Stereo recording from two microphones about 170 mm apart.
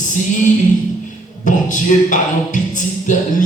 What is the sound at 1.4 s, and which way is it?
Speech, 50° left (ahead or behind).